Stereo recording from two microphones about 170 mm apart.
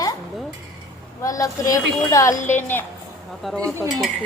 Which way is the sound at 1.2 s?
20° left (ahead or behind).